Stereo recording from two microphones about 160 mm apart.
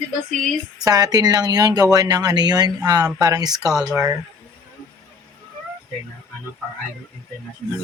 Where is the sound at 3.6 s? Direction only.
5° right (ahead or behind).